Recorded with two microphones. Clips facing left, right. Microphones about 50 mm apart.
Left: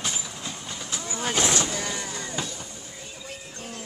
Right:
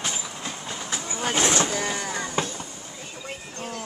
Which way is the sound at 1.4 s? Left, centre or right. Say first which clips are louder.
Right 3 dB; right.